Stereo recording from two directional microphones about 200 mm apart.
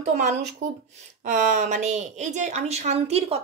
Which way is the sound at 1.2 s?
40° right (ahead or behind).